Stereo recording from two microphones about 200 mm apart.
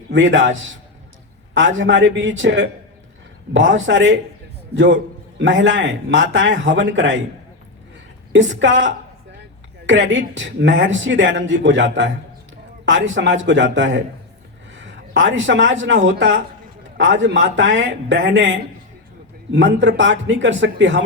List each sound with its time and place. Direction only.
0.1 s speech: 65° right (ahead or behind)
1.5 s a man's voice: 65° right (ahead or behind)
8.3 s a man's voice: 60° right (ahead or behind)